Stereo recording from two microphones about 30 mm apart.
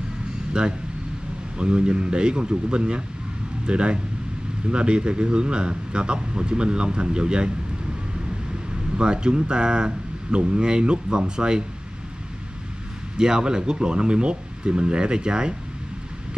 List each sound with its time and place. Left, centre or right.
0.5 s a man's voice: right
8.9 s a man's voice: right
13.2 s a man's voice: right